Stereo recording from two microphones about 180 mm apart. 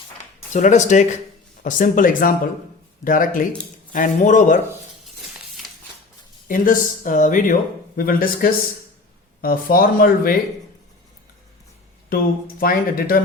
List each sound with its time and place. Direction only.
0.5 s speech: 40° left (ahead or behind)
6.5 s speech: 45° left (ahead or behind)
12.0 s speech: 55° left (ahead or behind)